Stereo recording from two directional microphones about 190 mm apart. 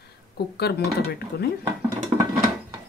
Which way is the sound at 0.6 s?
60° left (ahead or behind).